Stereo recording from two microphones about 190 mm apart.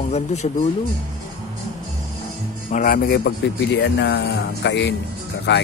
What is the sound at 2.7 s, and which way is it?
Speech, 45° left (ahead or behind).